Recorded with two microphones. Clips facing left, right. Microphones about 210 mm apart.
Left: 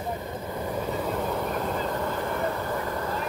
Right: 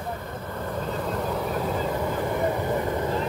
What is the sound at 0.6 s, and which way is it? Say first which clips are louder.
Vehicle: even; 10° left (ahead or behind).